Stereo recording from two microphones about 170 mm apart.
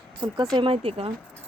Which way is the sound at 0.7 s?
35° right (ahead or behind).